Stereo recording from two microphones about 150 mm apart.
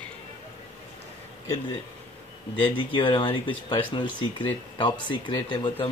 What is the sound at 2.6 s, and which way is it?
Speech, 35° left (ahead or behind).